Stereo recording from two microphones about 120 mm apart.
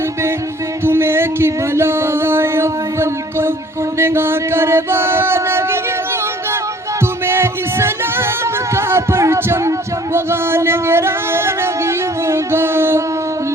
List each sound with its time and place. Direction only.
0.9 s music: 20° right (ahead or behind)
3.9 s mantra: 20° right (ahead or behind)
7.3 s music: 20° right (ahead or behind)